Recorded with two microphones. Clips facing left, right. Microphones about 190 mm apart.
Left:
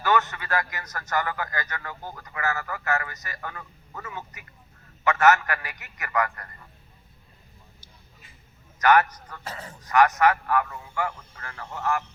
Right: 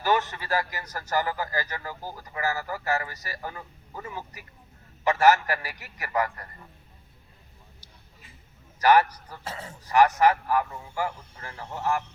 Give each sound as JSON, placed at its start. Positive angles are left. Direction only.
{"t": 0.0, "sound": "a man's voice", "side_deg": -35}
{"t": 8.8, "sound": "a man's voice", "side_deg": -30}